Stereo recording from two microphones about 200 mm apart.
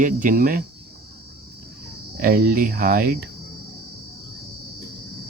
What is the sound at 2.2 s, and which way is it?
Speech, 45° right (ahead or behind).